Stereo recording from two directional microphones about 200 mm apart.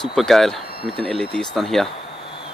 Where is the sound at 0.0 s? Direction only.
Centre (ahead or behind).